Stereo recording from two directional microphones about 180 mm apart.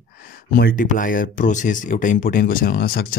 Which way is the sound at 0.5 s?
55° left (ahead or behind).